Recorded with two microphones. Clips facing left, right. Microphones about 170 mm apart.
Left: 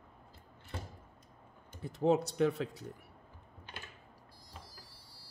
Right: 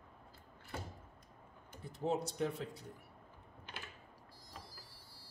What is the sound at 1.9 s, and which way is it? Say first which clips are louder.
Speech: left 8 dB; 75° left (ahead or behind).